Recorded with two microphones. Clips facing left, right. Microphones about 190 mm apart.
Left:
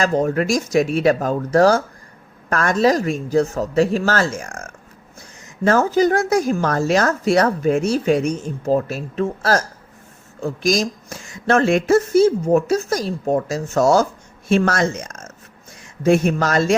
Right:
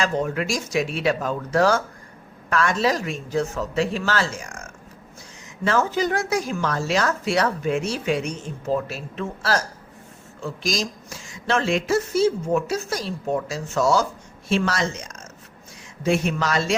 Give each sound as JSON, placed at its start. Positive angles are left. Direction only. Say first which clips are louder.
{"t": 0.0, "sound": "speech", "louder": "left 6 dB", "side_deg": 40}
{"t": 5.6, "sound": "speech", "louder": "left 6 dB", "side_deg": 40}